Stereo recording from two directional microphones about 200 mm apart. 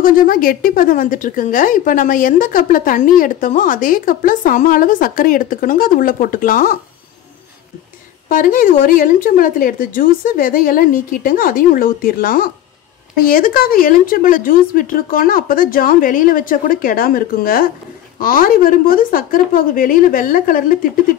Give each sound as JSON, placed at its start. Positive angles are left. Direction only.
{"t": 0.0, "sound": "speech", "side_deg": 45}
{"t": 8.3, "sound": "speech", "side_deg": 45}